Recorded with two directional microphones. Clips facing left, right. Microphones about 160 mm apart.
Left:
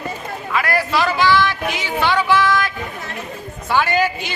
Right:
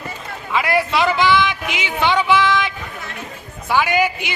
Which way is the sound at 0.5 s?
25° right (ahead or behind).